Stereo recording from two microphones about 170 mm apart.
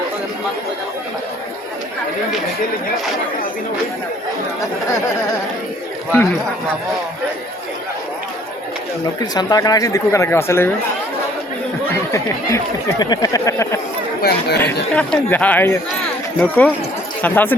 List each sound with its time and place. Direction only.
9.3 s speech: 25° left (ahead or behind)
13.0 s speech: 20° left (ahead or behind)
14.2 s speech: 65° left (ahead or behind)
14.9 s speech: 10° left (ahead or behind)